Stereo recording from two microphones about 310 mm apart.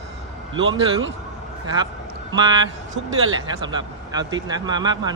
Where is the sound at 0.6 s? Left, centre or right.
Right.